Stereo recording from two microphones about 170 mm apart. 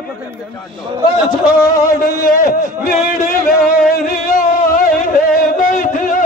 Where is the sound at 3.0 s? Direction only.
55° left (ahead or behind).